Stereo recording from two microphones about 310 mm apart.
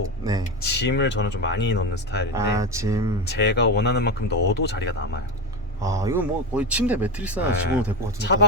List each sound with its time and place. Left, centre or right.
0.6 s speech: left
2.3 s speech: centre
3.2 s speech: left
5.8 s speech: centre
8.2 s speech: left